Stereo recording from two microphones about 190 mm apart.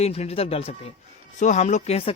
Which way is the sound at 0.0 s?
35° left (ahead or behind).